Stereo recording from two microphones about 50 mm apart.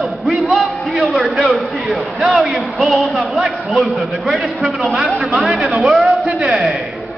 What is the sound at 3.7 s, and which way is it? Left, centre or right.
A man's voice, centre.